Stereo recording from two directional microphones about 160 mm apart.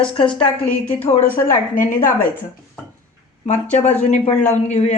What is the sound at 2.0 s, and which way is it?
Speech, 15° left (ahead or behind).